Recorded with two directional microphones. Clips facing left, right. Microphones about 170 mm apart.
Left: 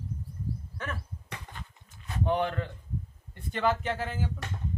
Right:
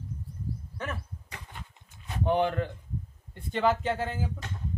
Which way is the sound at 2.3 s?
25° right (ahead or behind).